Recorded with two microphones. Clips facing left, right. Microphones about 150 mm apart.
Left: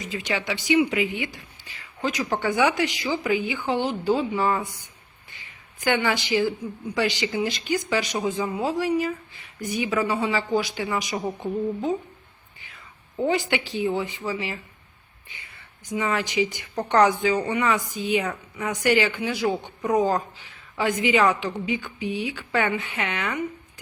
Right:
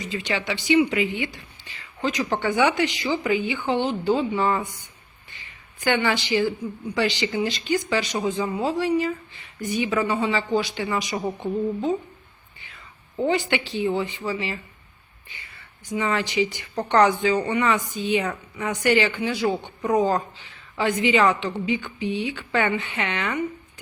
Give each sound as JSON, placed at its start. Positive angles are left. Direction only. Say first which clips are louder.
{"t": 0.0, "sound": "a woman's voice", "louder": "right 1 dB", "side_deg": 10}
{"t": 5.8, "sound": "a woman's voice", "louder": "right 1 dB", "side_deg": 10}
{"t": 13.1, "sound": "a woman's voice", "louder": "right 1 dB", "side_deg": 10}
{"t": 15.9, "sound": "a woman's voice", "louder": "right 1 dB", "side_deg": 10}